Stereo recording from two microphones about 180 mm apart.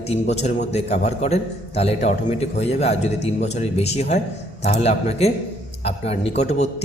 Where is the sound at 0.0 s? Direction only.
35° left (ahead or behind).